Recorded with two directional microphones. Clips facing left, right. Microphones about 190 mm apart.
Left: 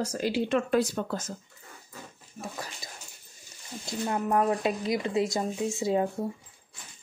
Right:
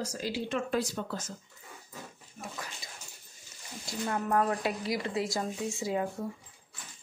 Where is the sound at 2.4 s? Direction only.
35° left (ahead or behind).